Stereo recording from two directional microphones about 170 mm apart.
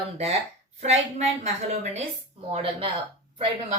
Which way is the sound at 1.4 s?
40° right (ahead or behind).